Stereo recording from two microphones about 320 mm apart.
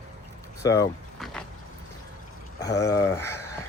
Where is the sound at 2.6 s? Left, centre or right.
Centre.